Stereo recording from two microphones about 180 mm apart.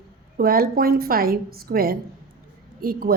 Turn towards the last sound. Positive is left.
turn(degrees=-55)  # may be behind; listen again after turning